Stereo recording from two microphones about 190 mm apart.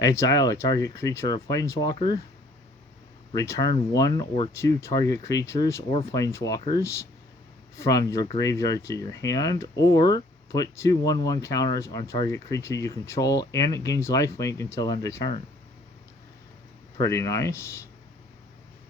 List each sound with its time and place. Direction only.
0.0 s speech: 15° left (ahead or behind)
3.3 s speech: 15° left (ahead or behind)
17.0 s speech: 15° left (ahead or behind)